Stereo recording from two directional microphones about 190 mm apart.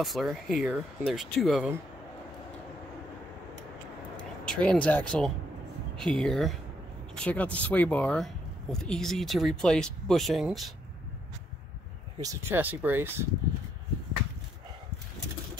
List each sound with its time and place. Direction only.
0.0 s speech: centre (ahead or behind)
4.2 s speech: 5° left (ahead or behind)
12.2 s speech: 15° right (ahead or behind)